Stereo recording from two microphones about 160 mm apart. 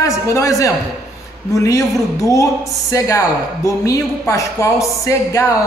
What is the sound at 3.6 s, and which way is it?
A woman's voice, 20° left (ahead or behind).